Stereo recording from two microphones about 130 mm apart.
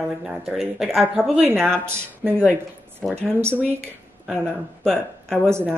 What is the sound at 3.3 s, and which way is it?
Speech, 20° right (ahead or behind).